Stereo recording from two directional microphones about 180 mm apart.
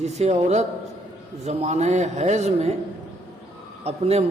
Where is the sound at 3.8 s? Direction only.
35° right (ahead or behind).